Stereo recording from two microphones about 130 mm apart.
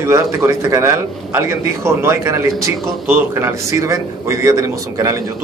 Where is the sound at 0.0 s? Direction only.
20° right (ahead or behind).